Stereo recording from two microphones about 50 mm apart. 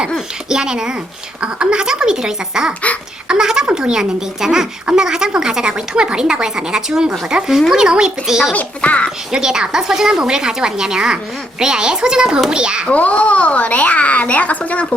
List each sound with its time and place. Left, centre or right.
0.5 s speech: centre
8.5 s a child's voice: left
9.3 s speech: centre
12.9 s a child's voice: left